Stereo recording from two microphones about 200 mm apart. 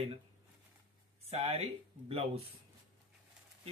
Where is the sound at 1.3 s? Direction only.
30° right (ahead or behind).